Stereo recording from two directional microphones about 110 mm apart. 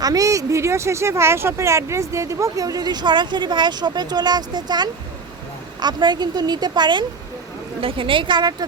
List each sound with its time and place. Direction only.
0.0 s speech: 35° right (ahead or behind)
7.8 s speech: 55° right (ahead or behind)